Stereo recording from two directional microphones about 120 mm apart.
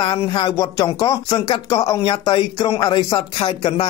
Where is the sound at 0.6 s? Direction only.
30° left (ahead or behind).